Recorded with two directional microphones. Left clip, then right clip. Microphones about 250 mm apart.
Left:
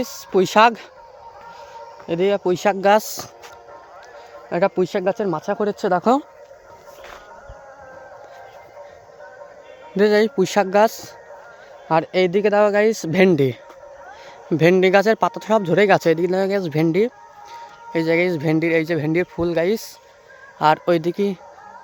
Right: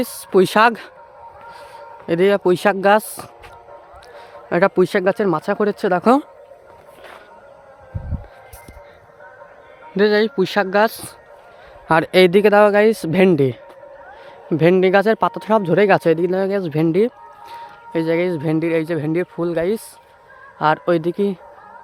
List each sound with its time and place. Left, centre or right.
0.0 s speech: centre
4.4 s speech: right
9.9 s speech: centre
11.9 s speech: right; by 21.3 s centre